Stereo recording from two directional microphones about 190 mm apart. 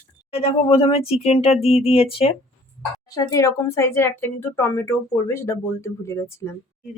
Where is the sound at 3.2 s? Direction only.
15° left (ahead or behind).